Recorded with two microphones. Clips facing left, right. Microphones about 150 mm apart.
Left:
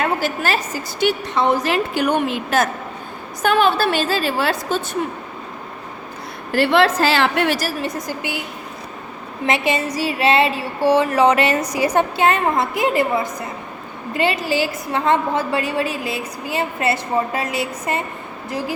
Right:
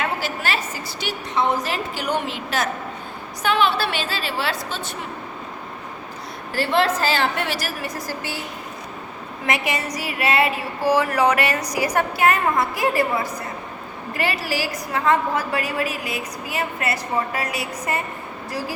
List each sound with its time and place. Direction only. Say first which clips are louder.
0.0 s a woman's voice: left 5 dB; 45° left (ahead or behind)
6.5 s a woman's voice: left 5 dB; 70° left (ahead or behind)
7.8 s a woman's voice: left 4 dB; 20° left (ahead or behind)
9.5 s a woman's voice: left 4 dB; 25° left (ahead or behind)